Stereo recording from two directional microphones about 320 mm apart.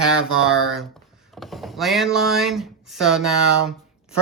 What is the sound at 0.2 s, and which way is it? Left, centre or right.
Speech, centre.